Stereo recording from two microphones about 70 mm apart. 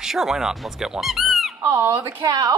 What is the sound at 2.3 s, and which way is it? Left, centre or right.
Speech, right.